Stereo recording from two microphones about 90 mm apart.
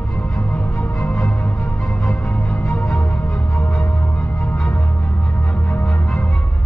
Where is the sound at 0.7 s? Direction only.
25° left (ahead or behind).